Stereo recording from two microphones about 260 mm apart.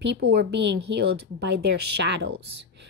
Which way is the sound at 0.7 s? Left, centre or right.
Right.